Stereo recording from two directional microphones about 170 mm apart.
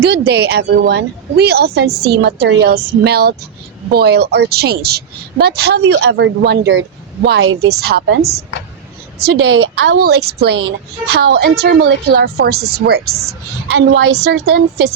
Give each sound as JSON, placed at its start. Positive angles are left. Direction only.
{"t": 0.0, "sound": "speech", "side_deg": -80}
{"t": 7.3, "sound": "a woman's voice", "side_deg": -70}